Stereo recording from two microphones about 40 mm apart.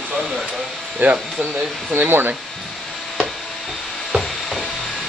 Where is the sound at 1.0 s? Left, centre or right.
Right.